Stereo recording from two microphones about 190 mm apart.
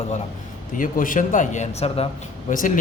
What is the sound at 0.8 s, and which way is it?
A man's voice, 45° left (ahead or behind).